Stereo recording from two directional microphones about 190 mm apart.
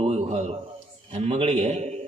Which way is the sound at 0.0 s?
35° right (ahead or behind).